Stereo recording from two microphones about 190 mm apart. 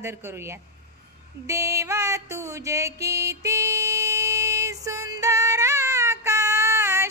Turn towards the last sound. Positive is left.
turn(degrees=-15)  # may be behind; listen again after turning